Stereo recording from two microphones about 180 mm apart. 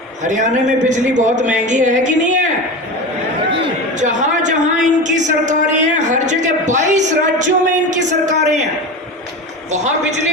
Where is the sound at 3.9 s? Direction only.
40° right (ahead or behind).